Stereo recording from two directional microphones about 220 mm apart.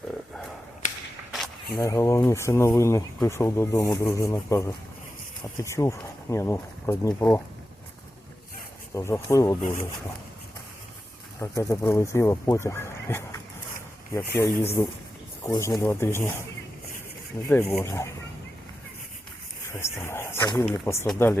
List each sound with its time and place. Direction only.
1.7 s speech: 15° left (ahead or behind)
5.7 s speech: 15° left (ahead or behind)
9.0 s speech: 10° left (ahead or behind)
9.6 s speech: 35° left (ahead or behind)
11.3 s speech: 10° left (ahead or behind)
17.5 s speech: 10° left (ahead or behind)
19.8 s speech: 10° left (ahead or behind)